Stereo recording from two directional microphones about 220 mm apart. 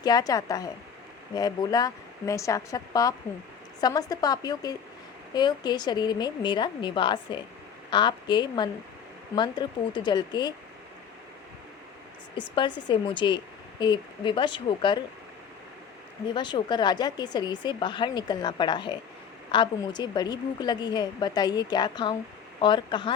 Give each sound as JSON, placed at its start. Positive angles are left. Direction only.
{"t": 0.0, "sound": "speech", "side_deg": 15}
{"t": 12.4, "sound": "speech", "side_deg": 20}
{"t": 16.3, "sound": "speech", "side_deg": 20}